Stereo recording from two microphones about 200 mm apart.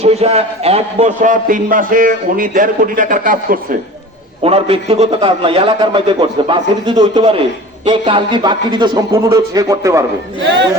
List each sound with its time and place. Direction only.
0.0 s a man's voice: 30° right (ahead or behind)
4.4 s a man's voice: 30° right (ahead or behind)